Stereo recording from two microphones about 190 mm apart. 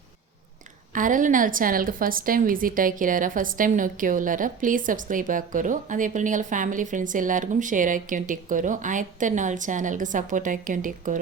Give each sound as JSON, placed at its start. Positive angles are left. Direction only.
{"t": 0.9, "sound": "a woman's voice", "side_deg": -45}